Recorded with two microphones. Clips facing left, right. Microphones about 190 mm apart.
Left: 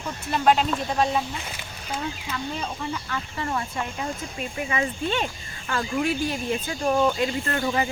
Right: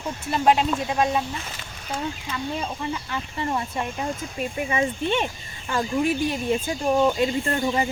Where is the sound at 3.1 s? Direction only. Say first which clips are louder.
Right 2 dB; 20° right (ahead or behind).